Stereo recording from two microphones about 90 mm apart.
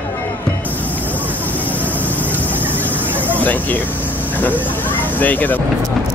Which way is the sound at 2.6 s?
20° right (ahead or behind).